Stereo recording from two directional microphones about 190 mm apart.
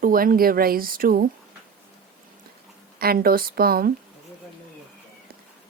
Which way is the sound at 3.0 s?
50° right (ahead or behind).